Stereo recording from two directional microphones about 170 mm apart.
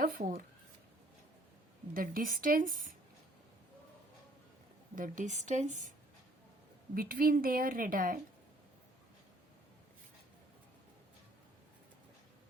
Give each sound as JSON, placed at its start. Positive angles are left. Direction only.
{"t": 0.0, "sound": "speech", "side_deg": -55}
{"t": 1.9, "sound": "a woman's voice", "side_deg": -55}
{"t": 4.9, "sound": "a woman's voice", "side_deg": -50}
{"t": 6.9, "sound": "a woman's voice", "side_deg": -60}